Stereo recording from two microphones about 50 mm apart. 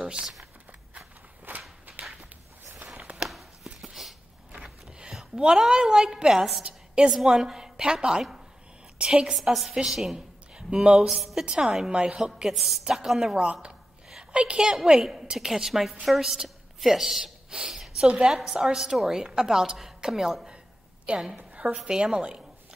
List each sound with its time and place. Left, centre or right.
0.0 s speech: right
1.5 s whip: right
1.9 s a sound: right
3.3 s chopping: centre
4.6 s a sound: centre
5.1 s a woman's voice: centre
9.3 s a woman's voice: centre
10.1 s a woman's voice: centre
11.9 s a woman's voice: right
12.4 s a woman's voice: centre
13.5 s a woman's voice: right; by 18.0 s centre
18.0 s a woman's voice: centre
21.4 s a sound: right
21.8 s a woman's voice: centre